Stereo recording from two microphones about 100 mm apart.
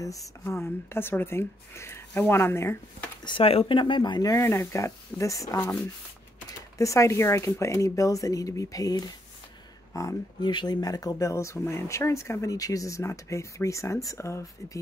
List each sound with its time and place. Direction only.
0.4 s a woman's voice: 25° left (ahead or behind)
3.3 s speech: 70° left (ahead or behind); by 4.4 s 40° left (ahead or behind)
4.4 s speech: 25° left (ahead or behind)
6.8 s speech: 30° left (ahead or behind)
10.4 s speech: 50° left (ahead or behind); by 14.8 s 30° left (ahead or behind)